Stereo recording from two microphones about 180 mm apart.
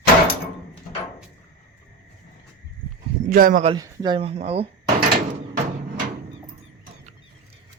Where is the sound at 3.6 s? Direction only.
25° right (ahead or behind).